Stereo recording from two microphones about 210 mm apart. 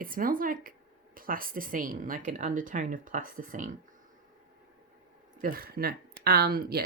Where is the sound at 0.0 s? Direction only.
40° right (ahead or behind).